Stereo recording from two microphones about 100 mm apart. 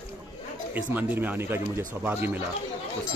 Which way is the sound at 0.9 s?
15° right (ahead or behind).